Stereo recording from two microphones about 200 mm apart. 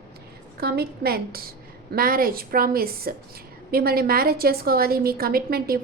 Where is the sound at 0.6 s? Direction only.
50° right (ahead or behind).